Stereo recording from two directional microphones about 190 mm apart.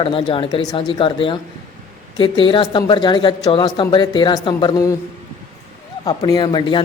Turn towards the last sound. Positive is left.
turn(degrees=25)  # may be behind; listen again after turning